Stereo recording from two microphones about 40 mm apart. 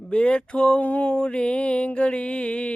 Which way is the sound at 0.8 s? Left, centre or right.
Left.